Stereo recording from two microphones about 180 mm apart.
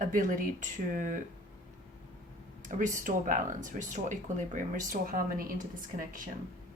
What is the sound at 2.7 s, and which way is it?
A woman's voice, 45° right (ahead or behind).